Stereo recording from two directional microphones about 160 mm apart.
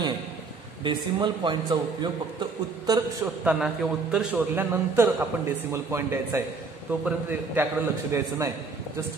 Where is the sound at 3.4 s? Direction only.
5° right (ahead or behind); by 8.3 s 20° right (ahead or behind).